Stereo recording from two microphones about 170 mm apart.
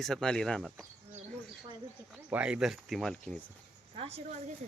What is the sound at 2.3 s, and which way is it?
Speech, 5° right (ahead or behind).